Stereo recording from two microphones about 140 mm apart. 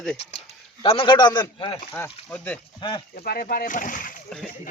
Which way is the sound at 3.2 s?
90° left.